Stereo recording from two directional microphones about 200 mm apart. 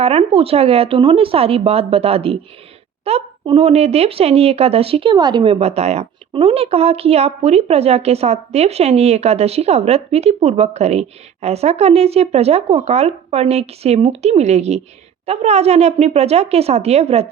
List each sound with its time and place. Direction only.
0.0 s speech: 30° right (ahead or behind)